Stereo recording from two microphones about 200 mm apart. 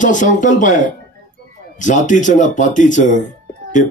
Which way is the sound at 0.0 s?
40° left (ahead or behind).